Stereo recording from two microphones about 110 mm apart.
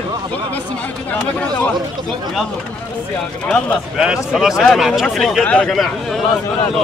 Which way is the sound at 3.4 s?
15° left (ahead or behind).